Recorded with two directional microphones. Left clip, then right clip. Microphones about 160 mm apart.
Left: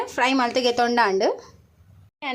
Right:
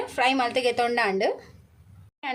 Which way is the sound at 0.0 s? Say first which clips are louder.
Left 2 dB; 35° left (ahead or behind).